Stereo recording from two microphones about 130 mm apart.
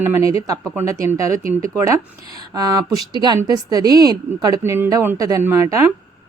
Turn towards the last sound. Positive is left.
turn(degrees=-20)  # may be behind; listen again after turning